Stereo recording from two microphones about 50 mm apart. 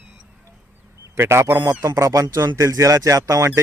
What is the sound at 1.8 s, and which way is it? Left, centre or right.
Speech, right.